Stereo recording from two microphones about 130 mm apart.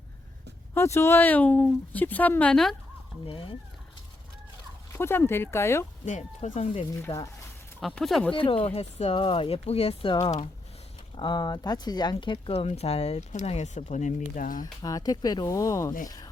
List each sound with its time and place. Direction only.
0.7 s speech: 20° left (ahead or behind); by 2.7 s 5° left (ahead or behind)
3.2 s speech: 40° left (ahead or behind)
4.9 s speech: 20° left (ahead or behind)
6.1 s speech: 65° left (ahead or behind)
7.1 s speech: 45° left (ahead or behind)
7.8 s speech: centre (ahead or behind)
8.4 s speech: 45° left (ahead or behind)
9.1 s speech: 40° left (ahead or behind)
10.2 s speech: 25° left (ahead or behind); by 14.6 s 90° left
14.6 s speech: 30° left (ahead or behind)